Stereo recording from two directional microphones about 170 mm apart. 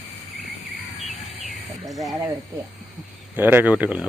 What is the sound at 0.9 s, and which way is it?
Bird, centre (ahead or behind).